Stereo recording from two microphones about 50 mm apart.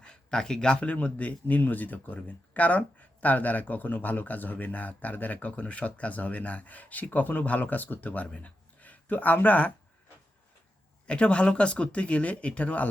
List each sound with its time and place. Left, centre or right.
0.0 s speech: centre; by 9.7 s left
11.0 s speech: left